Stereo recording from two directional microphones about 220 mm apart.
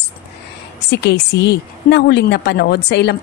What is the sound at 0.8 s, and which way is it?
A woman's voice, 50° left (ahead or behind).